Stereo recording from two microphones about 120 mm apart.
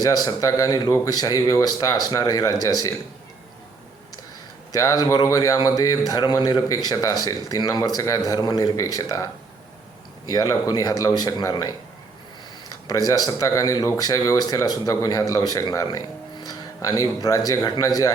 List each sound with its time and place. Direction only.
0.0 s speech: 35° left (ahead or behind)
4.7 s speech: 30° left (ahead or behind)
12.9 s speech: 30° left (ahead or behind)